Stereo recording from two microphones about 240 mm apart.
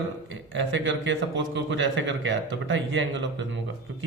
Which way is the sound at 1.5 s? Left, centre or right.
Right.